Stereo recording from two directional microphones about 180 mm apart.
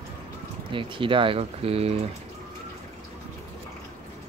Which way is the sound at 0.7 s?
30° right (ahead or behind).